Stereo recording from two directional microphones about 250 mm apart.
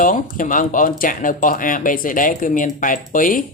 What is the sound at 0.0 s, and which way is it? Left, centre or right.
Speech, left.